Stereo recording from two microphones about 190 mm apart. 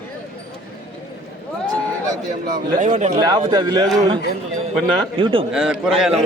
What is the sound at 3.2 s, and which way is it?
Speech, 25° right (ahead or behind).